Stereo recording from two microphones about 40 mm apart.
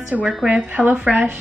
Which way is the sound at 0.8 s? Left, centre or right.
Right.